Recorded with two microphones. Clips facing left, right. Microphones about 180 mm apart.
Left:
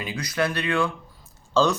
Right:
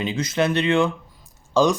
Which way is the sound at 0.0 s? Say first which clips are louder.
Right 4 dB; 25° right (ahead or behind).